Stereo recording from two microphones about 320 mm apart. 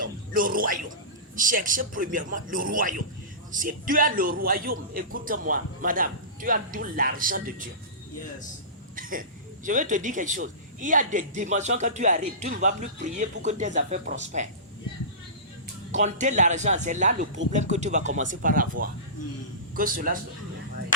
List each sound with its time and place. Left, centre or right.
0.0 s a sound: right
1.4 s a man's voice: right
9.0 s a man's voice: right
15.9 s a man's voice: right